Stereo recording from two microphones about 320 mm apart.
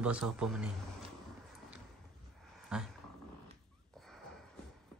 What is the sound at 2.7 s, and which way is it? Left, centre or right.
Dog, centre.